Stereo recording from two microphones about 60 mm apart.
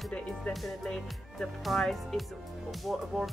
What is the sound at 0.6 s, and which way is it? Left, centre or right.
Speech, centre.